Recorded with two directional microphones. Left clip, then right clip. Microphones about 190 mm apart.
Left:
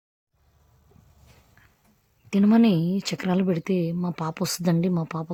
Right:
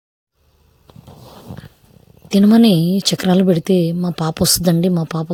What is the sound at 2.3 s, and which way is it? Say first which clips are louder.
A woman's voice: right 8 dB; 20° right (ahead or behind).